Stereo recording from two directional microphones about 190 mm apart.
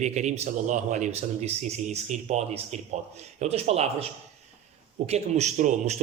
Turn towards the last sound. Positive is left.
turn(degrees=-40)  # may be behind; listen again after turning